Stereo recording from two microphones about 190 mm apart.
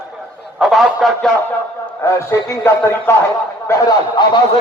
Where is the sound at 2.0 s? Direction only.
15° left (ahead or behind).